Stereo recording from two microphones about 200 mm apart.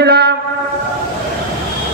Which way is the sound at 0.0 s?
55° right (ahead or behind).